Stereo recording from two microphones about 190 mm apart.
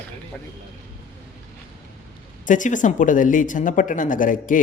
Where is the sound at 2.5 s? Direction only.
40° left (ahead or behind).